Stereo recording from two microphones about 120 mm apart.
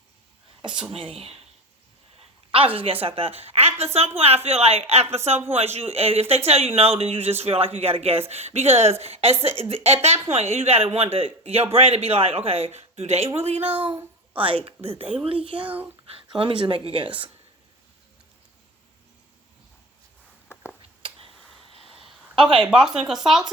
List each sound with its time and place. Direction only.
0.9 s a woman's voice: 50° right (ahead or behind)
2.5 s a woman's voice: 50° right (ahead or behind)
15.6 s speech: 15° right (ahead or behind)
16.3 s a woman's voice: 45° right (ahead or behind)
22.4 s a woman's voice: 45° right (ahead or behind)
22.6 s speech: 5° right (ahead or behind)